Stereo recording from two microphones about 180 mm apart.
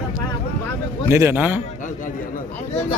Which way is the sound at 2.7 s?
35° left (ahead or behind).